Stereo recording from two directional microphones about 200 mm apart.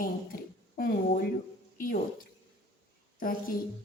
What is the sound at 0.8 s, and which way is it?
Speech, 45° left (ahead or behind).